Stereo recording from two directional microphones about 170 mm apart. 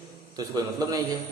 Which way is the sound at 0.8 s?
20° right (ahead or behind).